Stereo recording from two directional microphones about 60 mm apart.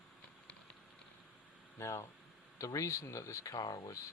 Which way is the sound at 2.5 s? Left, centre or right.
Left.